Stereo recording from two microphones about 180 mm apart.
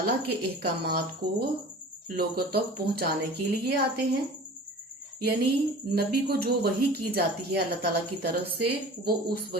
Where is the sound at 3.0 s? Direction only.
55° right (ahead or behind).